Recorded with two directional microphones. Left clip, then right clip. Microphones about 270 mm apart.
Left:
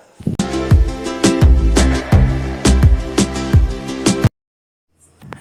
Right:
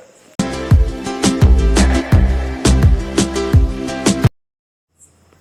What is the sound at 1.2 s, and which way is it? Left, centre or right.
Music, centre.